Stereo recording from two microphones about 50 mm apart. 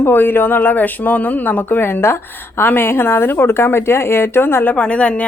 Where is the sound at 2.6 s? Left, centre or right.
Left.